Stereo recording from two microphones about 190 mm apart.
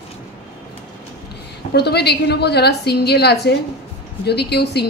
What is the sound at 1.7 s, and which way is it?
A woman's voice, 60° left (ahead or behind).